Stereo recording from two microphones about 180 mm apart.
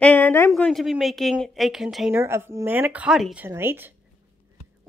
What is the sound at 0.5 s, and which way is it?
Speech, centre (ahead or behind).